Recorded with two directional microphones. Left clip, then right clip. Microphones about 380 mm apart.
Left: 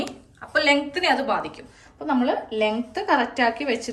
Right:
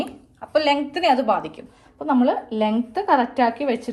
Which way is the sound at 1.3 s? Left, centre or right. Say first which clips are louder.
Right 3 dB; centre.